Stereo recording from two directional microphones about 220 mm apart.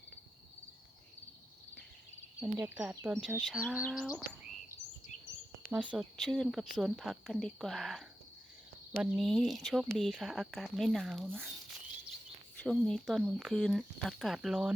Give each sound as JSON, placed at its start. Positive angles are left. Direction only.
{"t": 2.4, "sound": "speech", "side_deg": -5}
{"t": 5.0, "sound": "a sound", "side_deg": 35}
{"t": 5.7, "sound": "speech", "side_deg": -5}
{"t": 12.6, "sound": "speech", "side_deg": 0}